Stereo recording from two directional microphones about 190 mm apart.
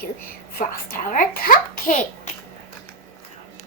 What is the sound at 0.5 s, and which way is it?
A child's voice, 50° left (ahead or behind).